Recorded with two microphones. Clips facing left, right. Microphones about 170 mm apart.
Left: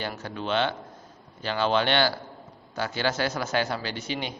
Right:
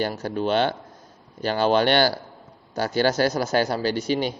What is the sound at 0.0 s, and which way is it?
A man's voice, 40° right (ahead or behind).